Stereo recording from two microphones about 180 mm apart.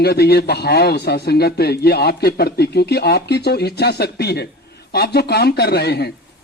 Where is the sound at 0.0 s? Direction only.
65° left (ahead or behind).